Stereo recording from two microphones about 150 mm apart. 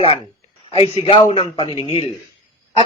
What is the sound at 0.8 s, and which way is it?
Speech, 40° left (ahead or behind).